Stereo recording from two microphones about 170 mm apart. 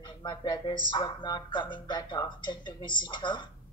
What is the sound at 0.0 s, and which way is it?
A woman's voice, 25° left (ahead or behind).